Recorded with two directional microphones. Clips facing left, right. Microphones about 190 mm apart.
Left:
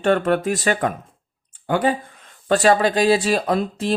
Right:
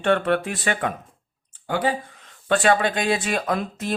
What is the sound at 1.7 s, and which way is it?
Speech, 55° left (ahead or behind).